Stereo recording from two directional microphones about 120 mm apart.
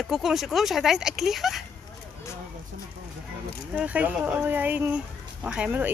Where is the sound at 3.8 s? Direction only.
10° right (ahead or behind).